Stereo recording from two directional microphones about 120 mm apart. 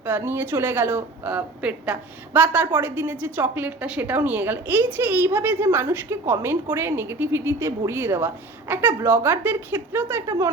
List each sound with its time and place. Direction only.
0.0 s a woman's voice: 15° right (ahead or behind)